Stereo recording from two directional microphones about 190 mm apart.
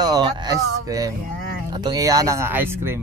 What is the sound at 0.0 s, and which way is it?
Music, 20° right (ahead or behind).